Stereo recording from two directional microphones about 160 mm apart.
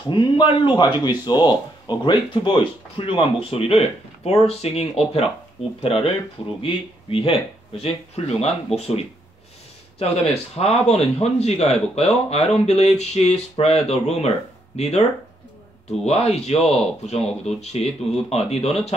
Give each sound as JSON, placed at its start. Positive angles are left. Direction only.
{"t": 0.1, "sound": "speech", "side_deg": 30}
{"t": 10.5, "sound": "speech", "side_deg": 40}